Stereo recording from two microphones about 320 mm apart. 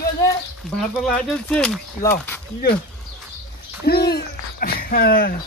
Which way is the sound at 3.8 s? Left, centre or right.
Left.